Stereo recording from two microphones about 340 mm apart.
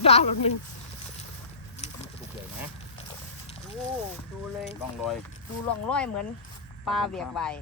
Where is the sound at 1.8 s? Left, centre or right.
Centre.